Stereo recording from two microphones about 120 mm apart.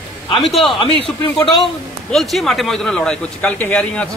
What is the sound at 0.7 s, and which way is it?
Speech, 50° left (ahead or behind).